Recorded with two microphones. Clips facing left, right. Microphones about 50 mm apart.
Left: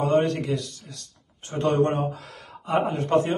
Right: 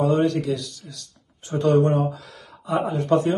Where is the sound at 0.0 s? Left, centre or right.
Left.